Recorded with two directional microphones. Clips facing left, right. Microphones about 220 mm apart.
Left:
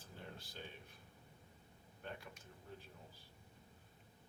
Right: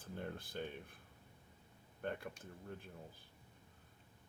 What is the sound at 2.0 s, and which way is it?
Speech, 55° right (ahead or behind).